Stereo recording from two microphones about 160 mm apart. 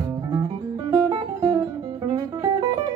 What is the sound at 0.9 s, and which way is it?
Music, 25° right (ahead or behind).